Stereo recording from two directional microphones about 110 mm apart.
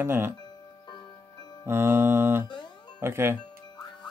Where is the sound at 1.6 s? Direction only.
20° right (ahead or behind).